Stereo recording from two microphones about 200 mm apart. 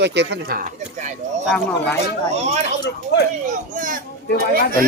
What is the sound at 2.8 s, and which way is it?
Speech, 55° left (ahead or behind).